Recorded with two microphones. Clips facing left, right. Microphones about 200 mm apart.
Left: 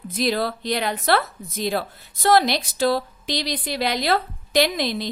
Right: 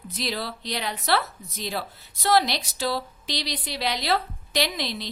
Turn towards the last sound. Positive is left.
turn(degrees=50)  # may be behind; listen again after turning